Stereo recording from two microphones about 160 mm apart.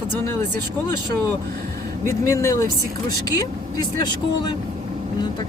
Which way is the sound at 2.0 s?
20° left (ahead or behind).